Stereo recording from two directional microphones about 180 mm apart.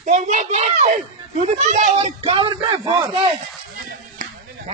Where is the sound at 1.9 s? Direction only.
30° right (ahead or behind).